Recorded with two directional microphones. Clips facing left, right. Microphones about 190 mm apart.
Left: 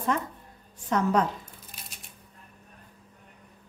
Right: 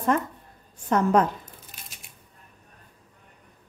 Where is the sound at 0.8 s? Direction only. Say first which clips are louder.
Right 4 dB; 50° right (ahead or behind).